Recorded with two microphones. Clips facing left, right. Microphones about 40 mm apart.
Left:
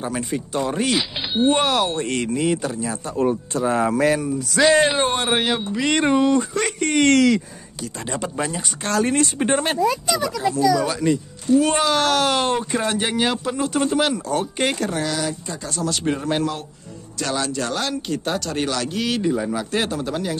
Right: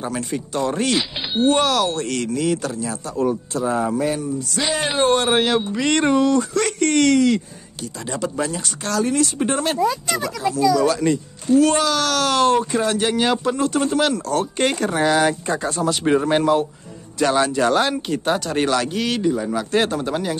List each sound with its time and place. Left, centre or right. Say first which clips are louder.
0.0 s speech: even; centre
1.5 s speech: right 2 dB; left
3.1 s speech: even; left
3.9 s speech: left 3 dB; left
4.8 s speech: right 2 dB; centre
6.2 s speech: right 1 dB; left
8.1 s speech: right 2 dB; left
8.8 s speech: even; left
9.4 s speech: even; left
10.8 s speech: right 2 dB; centre
11.6 s speech: right 1 dB; centre
13.1 s speech: right 3 dB; centre
15.1 s speech: right 8 dB; right
15.8 s speech: right 4 dB; centre